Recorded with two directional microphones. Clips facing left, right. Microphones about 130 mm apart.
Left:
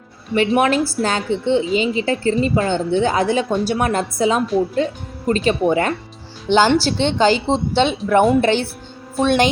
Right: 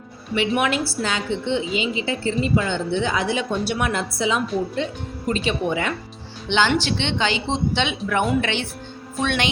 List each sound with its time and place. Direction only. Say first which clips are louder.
0.3 s a woman's voice: left 5 dB; 40° left (ahead or behind)